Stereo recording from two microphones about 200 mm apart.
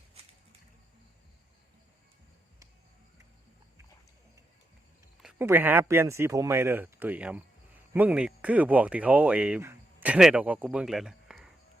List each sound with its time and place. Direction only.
5.2 s speech: 10° right (ahead or behind)